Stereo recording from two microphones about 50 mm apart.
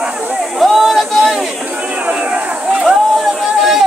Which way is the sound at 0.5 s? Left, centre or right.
Centre.